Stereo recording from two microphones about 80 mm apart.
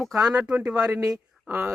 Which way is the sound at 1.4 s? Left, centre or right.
Right.